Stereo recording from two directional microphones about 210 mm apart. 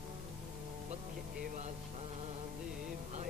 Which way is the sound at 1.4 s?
35° right (ahead or behind).